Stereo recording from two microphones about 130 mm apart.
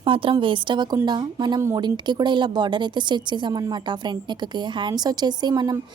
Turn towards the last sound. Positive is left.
turn(degrees=-35)  # may be behind; listen again after turning